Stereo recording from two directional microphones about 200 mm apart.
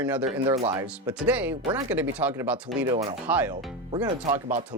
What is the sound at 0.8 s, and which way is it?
Speech, 10° right (ahead or behind).